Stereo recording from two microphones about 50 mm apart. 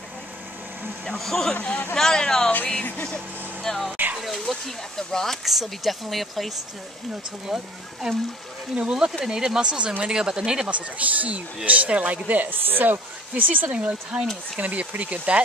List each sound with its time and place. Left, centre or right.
1.0 s speech: centre
3.6 s speech: centre
10.7 s speech: right
13.7 s speech: right